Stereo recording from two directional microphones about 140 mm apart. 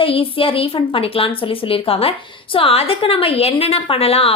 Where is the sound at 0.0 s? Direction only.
40° left (ahead or behind).